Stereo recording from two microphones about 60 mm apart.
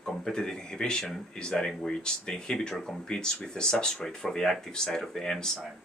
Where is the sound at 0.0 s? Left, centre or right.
Centre.